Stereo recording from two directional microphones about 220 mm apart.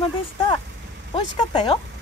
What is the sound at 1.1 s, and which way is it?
Speech, 20° left (ahead or behind).